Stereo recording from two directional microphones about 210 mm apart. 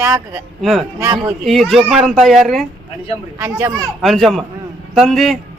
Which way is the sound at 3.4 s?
15° right (ahead or behind).